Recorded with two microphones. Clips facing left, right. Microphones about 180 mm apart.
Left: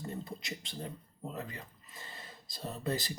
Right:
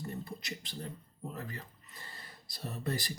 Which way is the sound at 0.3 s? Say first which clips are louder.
Even; 20° left (ahead or behind).